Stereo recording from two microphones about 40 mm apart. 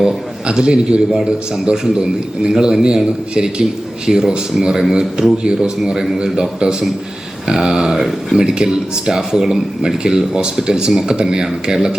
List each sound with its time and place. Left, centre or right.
0.4 s a man's voice: right; by 8.4 s centre
8.4 s speech: right